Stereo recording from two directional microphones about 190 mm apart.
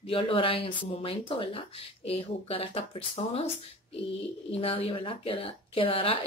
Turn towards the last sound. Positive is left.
turn(degrees=30)  # may be behind; listen again after turning